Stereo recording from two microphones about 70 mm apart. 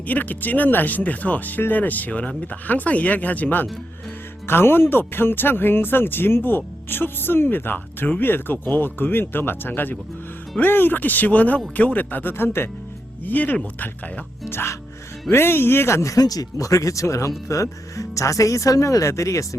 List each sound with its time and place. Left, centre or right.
0.1 s speech: left
14.4 s speech: left
16.2 s speech: left